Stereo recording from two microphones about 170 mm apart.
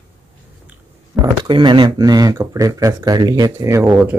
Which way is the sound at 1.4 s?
25° right (ahead or behind).